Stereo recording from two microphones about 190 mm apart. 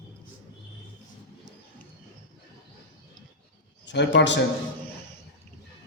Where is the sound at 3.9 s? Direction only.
65° left (ahead or behind).